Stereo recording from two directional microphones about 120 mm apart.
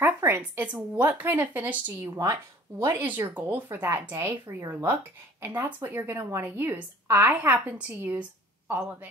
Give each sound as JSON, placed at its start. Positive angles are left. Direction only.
{"t": 0.0, "sound": "a woman's voice", "side_deg": -20}
{"t": 2.8, "sound": "a woman's voice", "side_deg": -20}